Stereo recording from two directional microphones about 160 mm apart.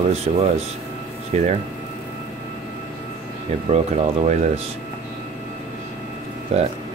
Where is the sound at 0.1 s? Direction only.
40° right (ahead or behind).